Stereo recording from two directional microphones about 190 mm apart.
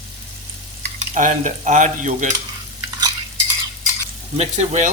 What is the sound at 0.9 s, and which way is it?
Stir, 45° right (ahead or behind).